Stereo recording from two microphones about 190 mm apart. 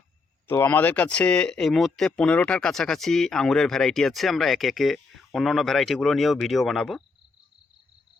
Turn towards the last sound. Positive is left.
turn(degrees=0)  # may be behind; listen again after turning